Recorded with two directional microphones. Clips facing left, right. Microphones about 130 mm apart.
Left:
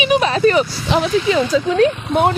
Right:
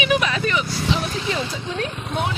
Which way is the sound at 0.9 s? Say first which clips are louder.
Left 8 dB; 90° left.